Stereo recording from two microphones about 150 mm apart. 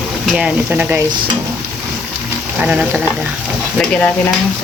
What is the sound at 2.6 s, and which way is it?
Speech, 10° right (ahead or behind).